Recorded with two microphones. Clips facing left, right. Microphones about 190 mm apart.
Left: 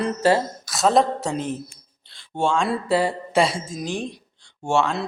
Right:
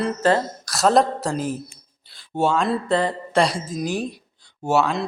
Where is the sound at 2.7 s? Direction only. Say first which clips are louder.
Even; 10° left (ahead or behind).